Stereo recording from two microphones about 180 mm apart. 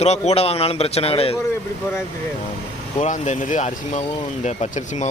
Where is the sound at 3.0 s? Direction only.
40° left (ahead or behind).